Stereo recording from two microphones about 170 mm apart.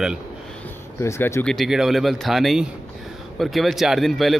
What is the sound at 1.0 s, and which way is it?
Speech, 15° left (ahead or behind).